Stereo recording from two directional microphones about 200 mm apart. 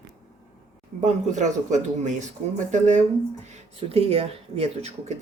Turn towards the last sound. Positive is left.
turn(degrees=-30)  # may be behind; listen again after turning